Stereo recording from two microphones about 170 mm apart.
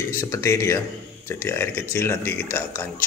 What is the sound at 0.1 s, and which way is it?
Speech, 15° left (ahead or behind).